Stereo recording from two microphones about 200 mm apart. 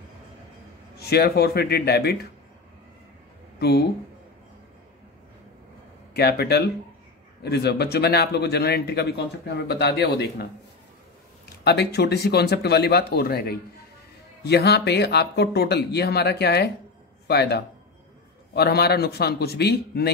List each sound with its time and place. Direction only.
0.9 s speech: 50° left (ahead or behind)
3.5 s speech: 50° left (ahead or behind)
6.1 s speech: 55° left (ahead or behind)